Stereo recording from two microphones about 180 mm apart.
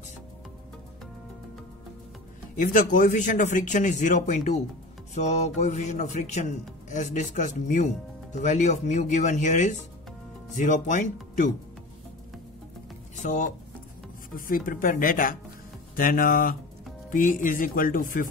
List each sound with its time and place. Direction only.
2.6 s a man's voice: 45° left (ahead or behind)
13.1 s speech: 45° left (ahead or behind)